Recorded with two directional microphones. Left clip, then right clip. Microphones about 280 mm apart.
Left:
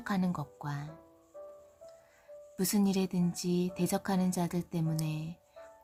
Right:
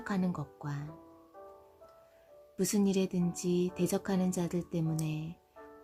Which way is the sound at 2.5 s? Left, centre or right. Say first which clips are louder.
Right 1 dB; centre.